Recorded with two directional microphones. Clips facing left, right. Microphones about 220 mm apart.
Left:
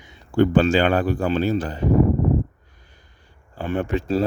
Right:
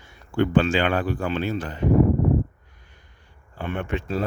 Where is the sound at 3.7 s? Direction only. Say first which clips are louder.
Left 5 dB; 35° left (ahead or behind).